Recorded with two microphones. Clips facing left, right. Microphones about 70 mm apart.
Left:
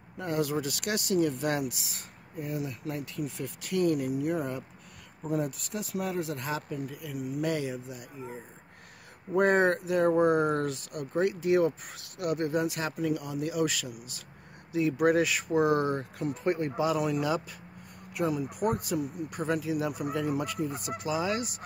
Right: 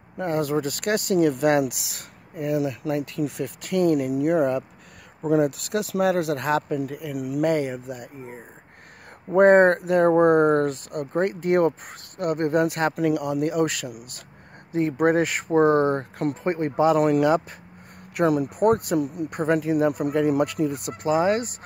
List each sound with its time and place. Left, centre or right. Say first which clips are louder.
0.2 s speech: right 6 dB; right
5.2 s speech: right 10 dB; right
7.5 s speech: right 7 dB; right
12.9 s speech: right 8 dB; right
14.7 s speech: right 4 dB; right
18.1 s speech: right 9 dB; right
18.5 s speech: right 9 dB; right
21.0 s speech: right 10 dB; right